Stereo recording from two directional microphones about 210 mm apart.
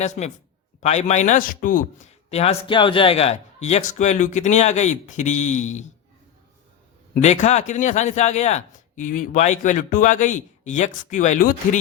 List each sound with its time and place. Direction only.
0.0 s a man's voice: 35° left (ahead or behind)
7.1 s a man's voice: 35° left (ahead or behind)